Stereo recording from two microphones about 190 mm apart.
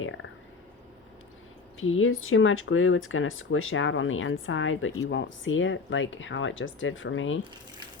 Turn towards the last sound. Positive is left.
turn(degrees=90)